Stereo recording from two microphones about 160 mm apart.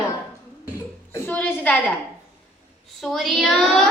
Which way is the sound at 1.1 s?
10° left (ahead or behind).